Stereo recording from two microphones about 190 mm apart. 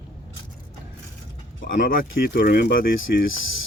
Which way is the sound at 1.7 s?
55° left (ahead or behind).